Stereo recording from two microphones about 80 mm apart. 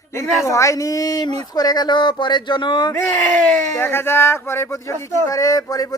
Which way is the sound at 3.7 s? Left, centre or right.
Left.